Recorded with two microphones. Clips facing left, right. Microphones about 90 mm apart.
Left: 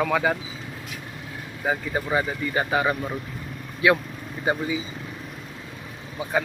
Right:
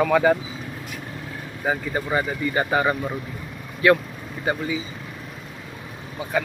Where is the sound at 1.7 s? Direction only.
Centre (ahead or behind).